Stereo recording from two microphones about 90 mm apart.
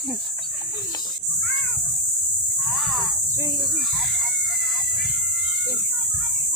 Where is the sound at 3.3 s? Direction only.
35° right (ahead or behind).